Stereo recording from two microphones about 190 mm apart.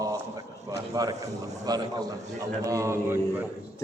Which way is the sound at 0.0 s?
15° right (ahead or behind).